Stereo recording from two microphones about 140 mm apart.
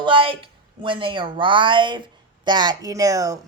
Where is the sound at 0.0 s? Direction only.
35° right (ahead or behind).